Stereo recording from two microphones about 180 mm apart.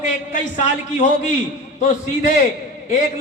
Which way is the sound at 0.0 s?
40° left (ahead or behind).